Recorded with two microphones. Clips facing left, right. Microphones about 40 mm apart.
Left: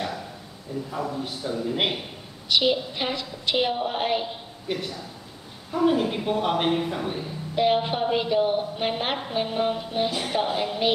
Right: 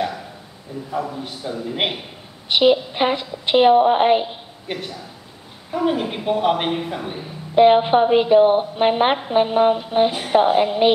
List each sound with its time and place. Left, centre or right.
0.9 s speech: centre
2.4 s a woman's voice: right
4.7 s speech: centre
7.5 s a woman's voice: right